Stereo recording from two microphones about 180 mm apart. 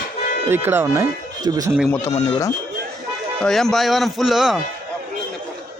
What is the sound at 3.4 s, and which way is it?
Speech, centre (ahead or behind).